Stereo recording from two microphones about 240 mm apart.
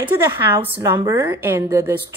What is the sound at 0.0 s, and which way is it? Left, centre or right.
A woman's voice, centre.